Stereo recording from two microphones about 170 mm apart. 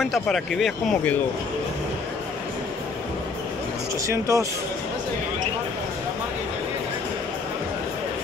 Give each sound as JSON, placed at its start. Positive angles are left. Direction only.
{"t": 0.0, "sound": "speech", "side_deg": 0}
{"t": 4.1, "sound": "speech", "side_deg": -20}